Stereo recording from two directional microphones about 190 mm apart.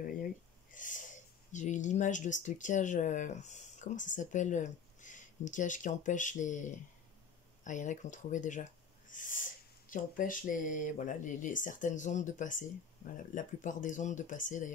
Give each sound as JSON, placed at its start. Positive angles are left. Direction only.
{"t": 0.2, "sound": "speech", "side_deg": 45}
{"t": 9.1, "sound": "owl", "side_deg": 45}